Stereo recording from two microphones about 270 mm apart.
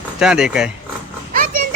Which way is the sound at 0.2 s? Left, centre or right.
Centre.